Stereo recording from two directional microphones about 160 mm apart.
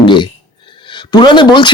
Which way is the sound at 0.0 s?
30° left (ahead or behind).